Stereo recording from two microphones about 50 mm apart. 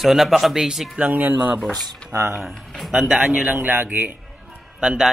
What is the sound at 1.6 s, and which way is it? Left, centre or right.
Speech, centre.